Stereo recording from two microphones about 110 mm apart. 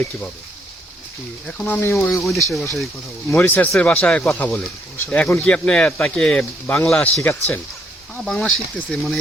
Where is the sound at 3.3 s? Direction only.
15° left (ahead or behind).